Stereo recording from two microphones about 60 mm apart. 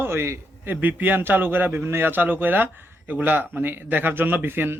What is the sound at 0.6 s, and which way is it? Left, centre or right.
Speech, right.